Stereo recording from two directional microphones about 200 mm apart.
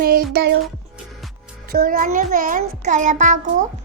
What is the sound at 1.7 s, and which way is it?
A child's voice, 45° right (ahead or behind).